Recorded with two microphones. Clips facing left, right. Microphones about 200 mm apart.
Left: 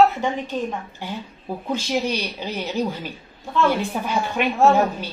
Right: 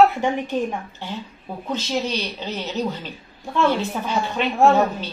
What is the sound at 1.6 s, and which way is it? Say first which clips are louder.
Speech: left 1 dB; 10° left (ahead or behind).